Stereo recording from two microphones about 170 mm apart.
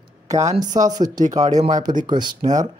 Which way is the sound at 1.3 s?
20° right (ahead or behind).